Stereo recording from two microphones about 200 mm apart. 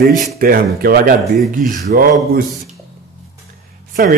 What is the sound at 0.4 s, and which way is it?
A man's voice, 45° right (ahead or behind).